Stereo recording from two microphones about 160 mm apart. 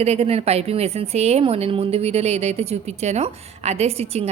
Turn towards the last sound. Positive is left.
turn(degrees=-40)  # may be behind; listen again after turning